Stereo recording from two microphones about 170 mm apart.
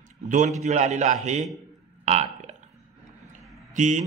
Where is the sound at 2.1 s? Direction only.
40° right (ahead or behind).